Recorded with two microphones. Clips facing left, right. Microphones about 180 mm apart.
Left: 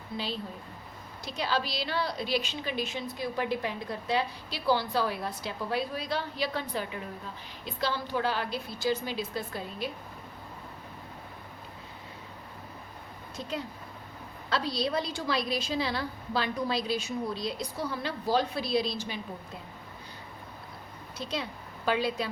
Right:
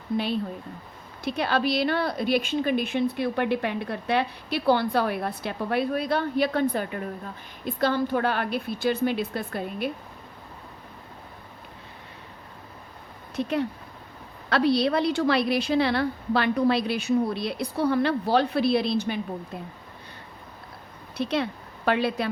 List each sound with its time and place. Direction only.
1.2 s a woman's voice: 60° right (ahead or behind)
13.3 s a woman's voice: 65° right (ahead or behind)
21.2 s speech: 65° right (ahead or behind)